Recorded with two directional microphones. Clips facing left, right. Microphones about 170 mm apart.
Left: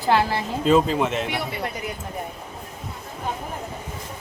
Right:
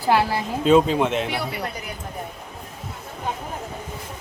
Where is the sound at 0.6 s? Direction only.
Centre (ahead or behind).